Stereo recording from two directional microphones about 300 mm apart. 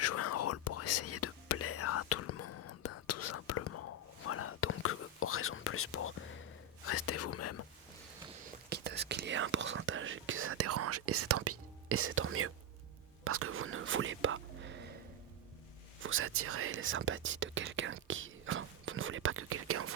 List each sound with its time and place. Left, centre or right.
0.0 s whispering: left
8.7 s whispering: right
16.0 s whispering: right